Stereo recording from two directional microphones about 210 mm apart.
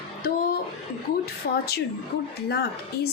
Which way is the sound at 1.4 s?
45° left (ahead or behind).